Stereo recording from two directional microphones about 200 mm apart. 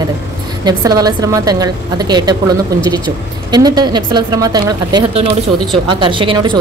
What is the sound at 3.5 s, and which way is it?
A woman's voice, 20° right (ahead or behind).